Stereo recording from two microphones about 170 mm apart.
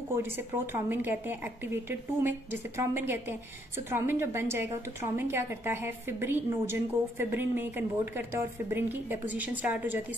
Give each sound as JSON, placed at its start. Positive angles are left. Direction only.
{"t": 0.1, "sound": "a woman's voice", "side_deg": -15}